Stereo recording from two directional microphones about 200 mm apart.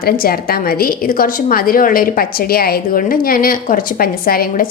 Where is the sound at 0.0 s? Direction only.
50° left (ahead or behind).